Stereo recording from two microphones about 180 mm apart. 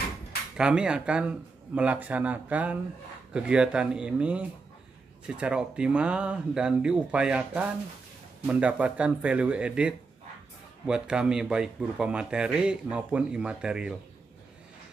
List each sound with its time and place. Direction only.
0.6 s a man's voice: 5° right (ahead or behind)